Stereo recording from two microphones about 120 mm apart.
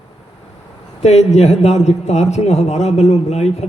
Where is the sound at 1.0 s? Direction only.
65° left (ahead or behind).